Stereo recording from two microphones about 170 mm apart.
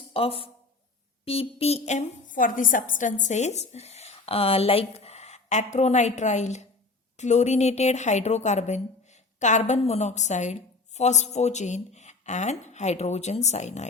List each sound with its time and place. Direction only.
0.1 s speech: 35° left (ahead or behind)